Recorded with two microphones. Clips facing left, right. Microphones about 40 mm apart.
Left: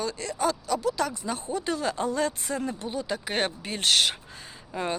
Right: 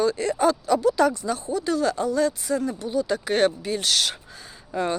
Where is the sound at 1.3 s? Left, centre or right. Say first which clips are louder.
Right 5 dB; left.